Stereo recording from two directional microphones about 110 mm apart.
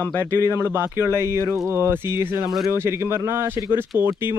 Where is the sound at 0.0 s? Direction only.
15° left (ahead or behind).